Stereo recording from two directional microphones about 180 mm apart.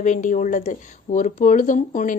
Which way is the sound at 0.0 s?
45° left (ahead or behind).